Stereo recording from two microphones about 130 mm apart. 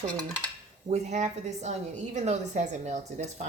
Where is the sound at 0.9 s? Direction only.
60° right (ahead or behind).